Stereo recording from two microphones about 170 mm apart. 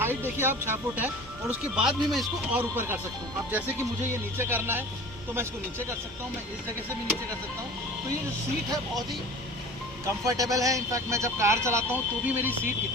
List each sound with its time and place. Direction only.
0.0 s speech: 15° right (ahead or behind)
4.4 s speech: 15° right (ahead or behind)
10.2 s speech: 20° right (ahead or behind)